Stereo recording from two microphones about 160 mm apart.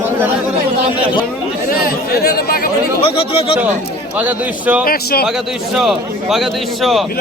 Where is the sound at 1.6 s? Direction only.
65° left (ahead or behind).